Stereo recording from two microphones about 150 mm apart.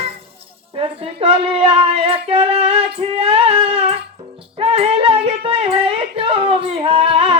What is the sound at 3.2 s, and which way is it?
Music, 40° right (ahead or behind).